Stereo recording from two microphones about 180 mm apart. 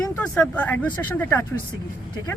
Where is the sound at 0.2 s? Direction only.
10° left (ahead or behind).